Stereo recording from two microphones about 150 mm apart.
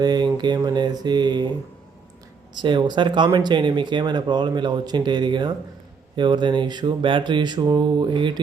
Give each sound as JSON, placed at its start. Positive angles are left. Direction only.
{"t": 0.0, "sound": "speech", "side_deg": -30}
{"t": 2.6, "sound": "speech", "side_deg": -30}